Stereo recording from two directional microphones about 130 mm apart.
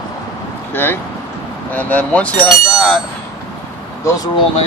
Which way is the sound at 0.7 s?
15° left (ahead or behind).